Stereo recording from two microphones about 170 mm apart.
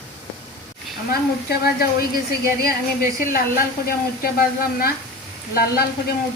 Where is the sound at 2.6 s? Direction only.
60° left (ahead or behind).